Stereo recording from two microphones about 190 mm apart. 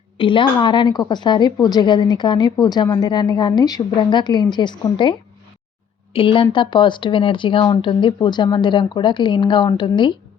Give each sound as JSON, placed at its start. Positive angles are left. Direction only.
{"t": 0.2, "sound": "a woman's voice", "side_deg": 25}
{"t": 6.1, "sound": "a woman's voice", "side_deg": 30}